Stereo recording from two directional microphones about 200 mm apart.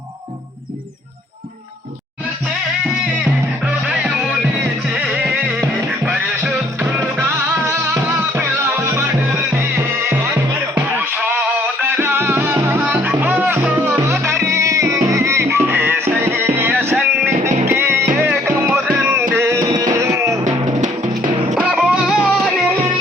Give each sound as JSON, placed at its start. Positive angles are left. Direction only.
{"t": 3.7, "sound": "music", "side_deg": -5}
{"t": 6.1, "sound": "music", "side_deg": -10}
{"t": 10.1, "sound": "music", "side_deg": -10}
{"t": 20.7, "sound": "music", "side_deg": -35}
{"t": 21.5, "sound": "music", "side_deg": 0}